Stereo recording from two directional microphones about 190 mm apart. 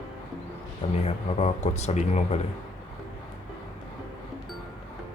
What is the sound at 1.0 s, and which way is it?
Speech, 35° left (ahead or behind).